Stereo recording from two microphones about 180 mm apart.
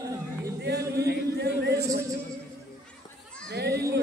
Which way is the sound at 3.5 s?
65° right (ahead or behind).